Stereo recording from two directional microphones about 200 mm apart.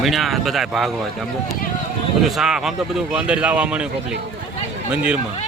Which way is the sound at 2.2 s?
Centre (ahead or behind).